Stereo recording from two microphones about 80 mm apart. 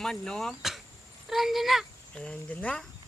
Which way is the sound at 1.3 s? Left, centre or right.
Centre.